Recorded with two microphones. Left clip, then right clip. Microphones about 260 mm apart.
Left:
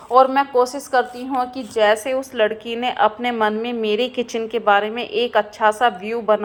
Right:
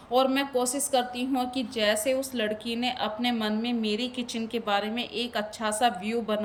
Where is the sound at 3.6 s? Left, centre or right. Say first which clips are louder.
Left 9 dB; centre.